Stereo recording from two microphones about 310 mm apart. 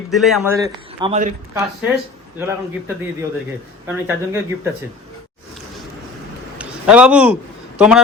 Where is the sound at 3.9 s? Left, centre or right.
Centre.